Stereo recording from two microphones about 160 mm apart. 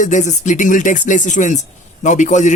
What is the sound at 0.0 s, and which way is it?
Speech, 50° left (ahead or behind).